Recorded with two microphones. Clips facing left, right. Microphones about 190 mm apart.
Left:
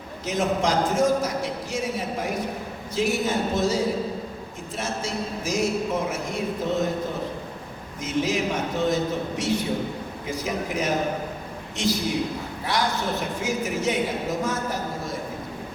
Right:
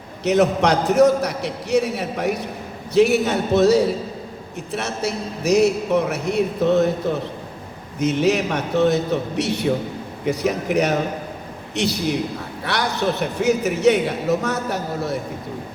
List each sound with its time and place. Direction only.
0.3 s a man's voice: 70° right (ahead or behind)
7.9 s a man's voice: 70° right (ahead or behind)